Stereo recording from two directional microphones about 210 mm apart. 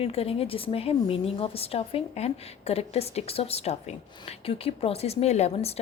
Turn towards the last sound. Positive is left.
turn(degrees=30)  # may be behind; listen again after turning